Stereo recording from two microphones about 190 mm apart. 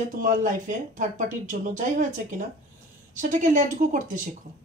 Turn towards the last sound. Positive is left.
turn(degrees=-45)  # may be behind; listen again after turning